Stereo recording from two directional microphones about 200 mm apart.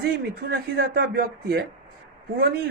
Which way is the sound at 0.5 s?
55° right (ahead or behind).